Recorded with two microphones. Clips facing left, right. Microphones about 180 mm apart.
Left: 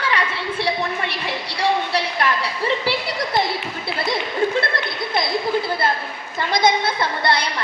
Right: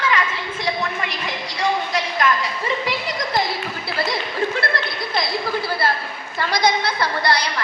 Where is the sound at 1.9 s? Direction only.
30° left (ahead or behind).